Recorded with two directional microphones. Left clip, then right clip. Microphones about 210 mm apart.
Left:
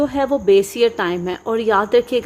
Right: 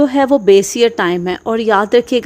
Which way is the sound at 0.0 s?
35° right (ahead or behind).